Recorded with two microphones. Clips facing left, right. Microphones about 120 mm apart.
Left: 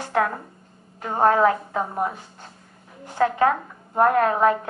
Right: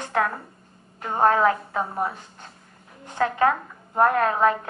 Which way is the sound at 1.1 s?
30° left (ahead or behind).